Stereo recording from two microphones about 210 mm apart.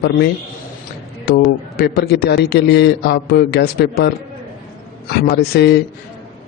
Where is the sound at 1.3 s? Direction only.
50° left (ahead or behind).